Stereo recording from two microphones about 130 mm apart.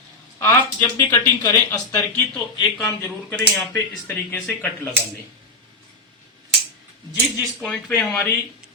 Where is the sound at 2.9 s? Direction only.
15° left (ahead or behind).